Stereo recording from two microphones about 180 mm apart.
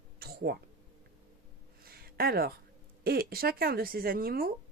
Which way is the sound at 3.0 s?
55° right (ahead or behind).